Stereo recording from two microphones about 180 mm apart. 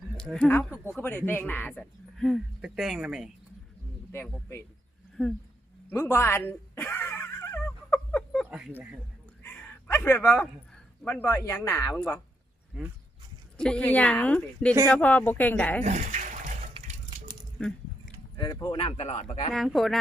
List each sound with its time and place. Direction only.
0.2 s speech: 5° left (ahead or behind)
5.2 s speech: centre (ahead or behind)
5.9 s a sound: 15° left (ahead or behind)
8.4 s speech: 5° right (ahead or behind)
9.4 s a sound: 10° left (ahead or behind)
11.0 s speech: 10° left (ahead or behind)
12.7 s speech: 5° right (ahead or behind)
13.6 s speech: 5° left (ahead or behind)
15.8 s a sound: 40° right (ahead or behind)
17.6 s a sound: 5° left (ahead or behind)
18.3 s speech: 20° left (ahead or behind)
19.5 s speech: centre (ahead or behind)